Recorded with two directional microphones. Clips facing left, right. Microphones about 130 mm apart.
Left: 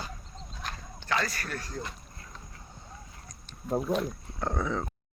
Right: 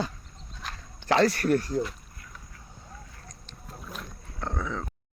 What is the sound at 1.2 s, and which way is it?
Speech, 70° right (ahead or behind).